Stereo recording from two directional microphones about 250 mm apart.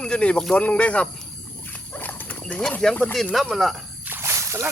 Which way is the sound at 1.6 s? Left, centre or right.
Centre.